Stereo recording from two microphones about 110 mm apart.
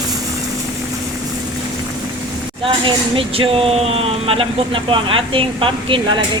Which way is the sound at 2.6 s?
55° right (ahead or behind).